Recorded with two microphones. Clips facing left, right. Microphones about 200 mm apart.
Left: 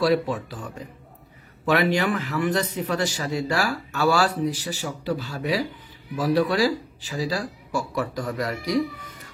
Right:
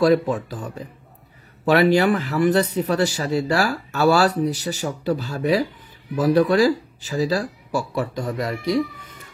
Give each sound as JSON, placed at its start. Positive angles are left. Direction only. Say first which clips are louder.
{"t": 0.0, "sound": "a man's voice", "louder": "right 4 dB", "side_deg": -45}
{"t": 7.9, "sound": "speech", "louder": "right 2 dB", "side_deg": -25}